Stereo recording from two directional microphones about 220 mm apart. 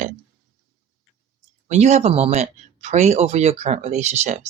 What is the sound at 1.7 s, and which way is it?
Speech, 30° right (ahead or behind).